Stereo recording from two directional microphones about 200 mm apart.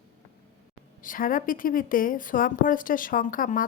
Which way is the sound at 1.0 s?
45° left (ahead or behind).